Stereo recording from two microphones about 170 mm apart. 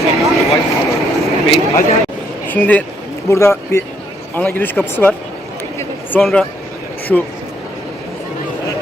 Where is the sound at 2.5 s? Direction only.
10° left (ahead or behind).